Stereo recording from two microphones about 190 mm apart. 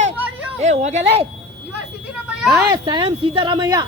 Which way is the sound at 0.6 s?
35° right (ahead or behind).